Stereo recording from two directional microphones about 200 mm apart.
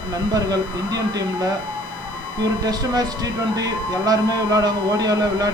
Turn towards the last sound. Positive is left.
turn(degrees=-20)  # may be behind; listen again after turning